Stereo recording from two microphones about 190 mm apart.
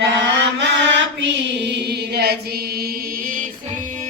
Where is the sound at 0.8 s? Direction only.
70° right (ahead or behind).